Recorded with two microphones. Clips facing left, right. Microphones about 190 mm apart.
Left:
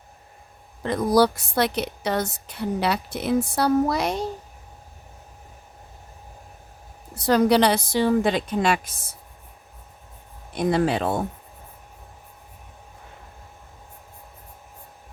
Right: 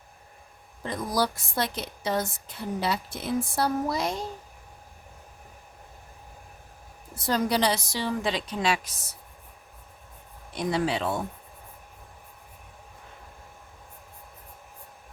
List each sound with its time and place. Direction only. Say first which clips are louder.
0.8 s a woman's voice: left 9 dB; 70° left (ahead or behind)
7.2 s a woman's voice: left 7 dB; 70° left (ahead or behind); by 9.1 s 55° left (ahead or behind)
10.5 s a woman's voice: left 5 dB; 55° left (ahead or behind)